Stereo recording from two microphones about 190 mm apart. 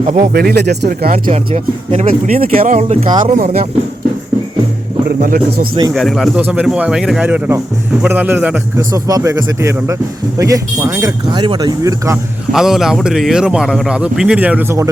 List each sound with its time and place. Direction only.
0.0 s speech: 40° right (ahead or behind)
0.3 s speech: 60° right (ahead or behind)
1.3 s speech: 35° right (ahead or behind)
2.3 s speech: 50° right (ahead or behind)
2.9 s speech: 25° right (ahead or behind)
5.0 s speech: 55° right (ahead or behind)
5.9 s a man's voice: centre (ahead or behind); by 12.2 s 15° right (ahead or behind)
12.5 s a man's voice: centre (ahead or behind)